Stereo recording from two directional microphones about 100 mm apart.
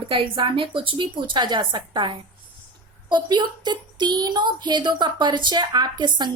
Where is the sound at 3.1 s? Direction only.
50° right (ahead or behind).